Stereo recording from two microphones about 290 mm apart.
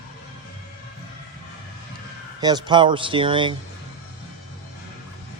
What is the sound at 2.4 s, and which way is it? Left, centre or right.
Speech, centre.